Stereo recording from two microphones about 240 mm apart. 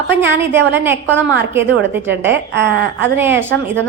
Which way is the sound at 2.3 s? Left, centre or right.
Right.